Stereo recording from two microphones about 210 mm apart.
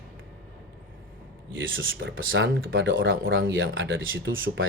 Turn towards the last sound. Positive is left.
turn(degrees=-65)  # may be behind; listen again after turning